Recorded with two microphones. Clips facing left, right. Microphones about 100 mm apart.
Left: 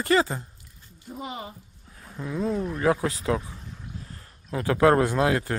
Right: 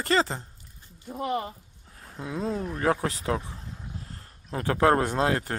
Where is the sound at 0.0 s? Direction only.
35° right (ahead or behind).